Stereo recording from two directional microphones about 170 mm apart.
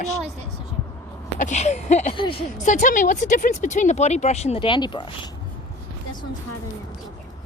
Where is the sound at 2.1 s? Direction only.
30° left (ahead or behind).